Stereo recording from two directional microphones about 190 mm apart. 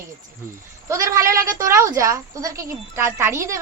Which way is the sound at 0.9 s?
15° right (ahead or behind).